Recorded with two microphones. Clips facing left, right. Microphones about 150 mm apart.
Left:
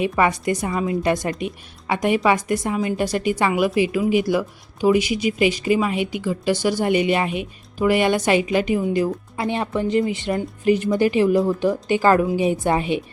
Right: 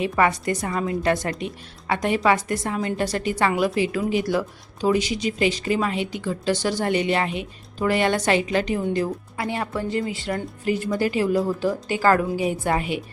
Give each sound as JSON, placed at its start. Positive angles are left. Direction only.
{"t": 0.0, "sound": "a woman's voice", "side_deg": 15}